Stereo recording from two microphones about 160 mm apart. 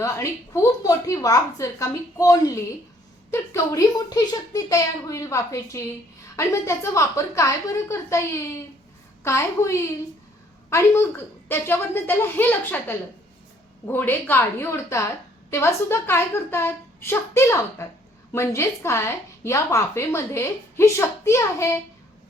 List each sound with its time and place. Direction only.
0.0 s a woman's voice: 20° left (ahead or behind)